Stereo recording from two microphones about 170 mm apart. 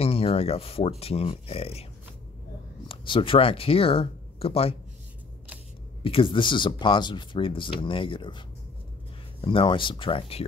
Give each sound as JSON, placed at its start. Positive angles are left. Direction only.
{"t": 0.0, "sound": "speech", "side_deg": 35}
{"t": 2.9, "sound": "speech", "side_deg": 30}
{"t": 6.0, "sound": "speech", "side_deg": 30}